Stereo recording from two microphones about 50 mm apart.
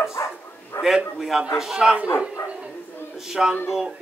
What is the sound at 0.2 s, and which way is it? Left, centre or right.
Dog, left.